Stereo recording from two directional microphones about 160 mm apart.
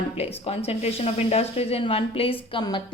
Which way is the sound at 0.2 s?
40° left (ahead or behind).